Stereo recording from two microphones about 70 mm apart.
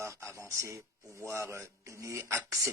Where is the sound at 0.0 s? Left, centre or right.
Right.